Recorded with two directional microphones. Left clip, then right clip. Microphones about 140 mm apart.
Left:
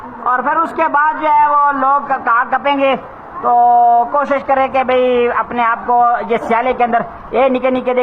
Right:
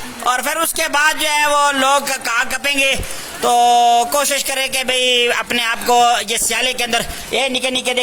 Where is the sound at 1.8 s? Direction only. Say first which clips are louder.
Left 2 dB; 45° right (ahead or behind).